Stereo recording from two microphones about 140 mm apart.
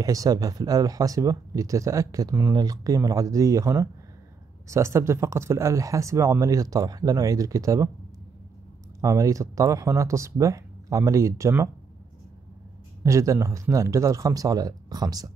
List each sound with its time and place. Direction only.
0.0 s speech: 25° right (ahead or behind)
9.0 s speech: 20° right (ahead or behind)
13.0 s speech: 20° right (ahead or behind)